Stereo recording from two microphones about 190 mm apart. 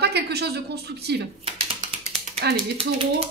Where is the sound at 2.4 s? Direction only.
60° right (ahead or behind).